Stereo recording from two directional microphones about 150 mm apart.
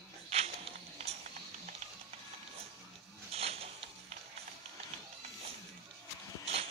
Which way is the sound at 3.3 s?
40° right (ahead or behind).